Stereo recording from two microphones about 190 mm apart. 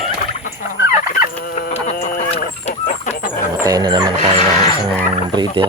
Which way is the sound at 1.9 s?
50° left (ahead or behind).